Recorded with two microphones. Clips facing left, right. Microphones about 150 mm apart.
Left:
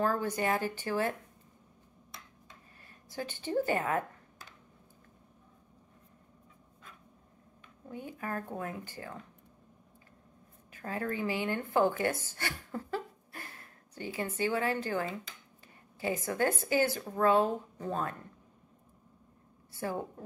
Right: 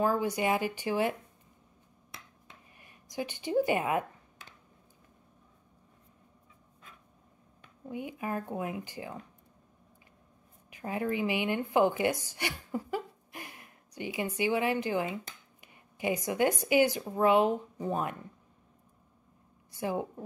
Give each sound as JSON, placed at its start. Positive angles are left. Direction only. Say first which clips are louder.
{"t": 0.0, "sound": "speech", "louder": "right 2 dB", "side_deg": -15}
{"t": 2.8, "sound": "speech", "louder": "right 3 dB", "side_deg": -15}
{"t": 7.9, "sound": "speech", "louder": "right 3 dB", "side_deg": -15}
{"t": 10.7, "sound": "a woman's voice", "louder": "right 3 dB", "side_deg": -15}
{"t": 19.7, "sound": "a woman's voice", "louder": "right 3 dB", "side_deg": -15}